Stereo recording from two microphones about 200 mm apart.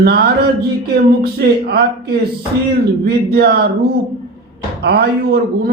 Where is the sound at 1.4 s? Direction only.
60° right (ahead or behind).